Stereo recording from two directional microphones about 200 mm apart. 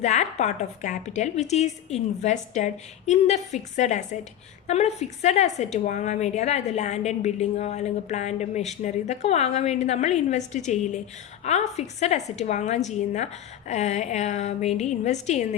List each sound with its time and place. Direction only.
0.0 s a woman's voice: 35° left (ahead or behind)